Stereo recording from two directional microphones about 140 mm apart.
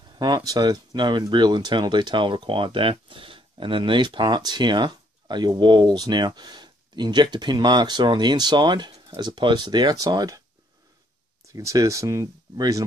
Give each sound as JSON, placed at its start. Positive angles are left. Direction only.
{"t": 0.2, "sound": "speech", "side_deg": -30}
{"t": 11.4, "sound": "speech", "side_deg": -25}